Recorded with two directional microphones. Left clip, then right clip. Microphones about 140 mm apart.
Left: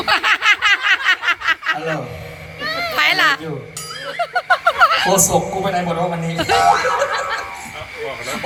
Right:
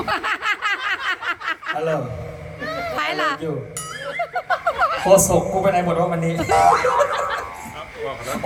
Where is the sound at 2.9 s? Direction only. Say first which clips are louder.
Left 8 dB; centre (ahead or behind).